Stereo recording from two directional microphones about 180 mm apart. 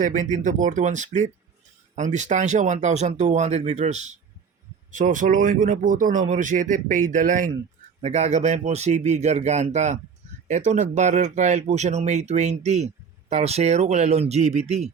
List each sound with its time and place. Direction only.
0.0 s speech: 45° right (ahead or behind)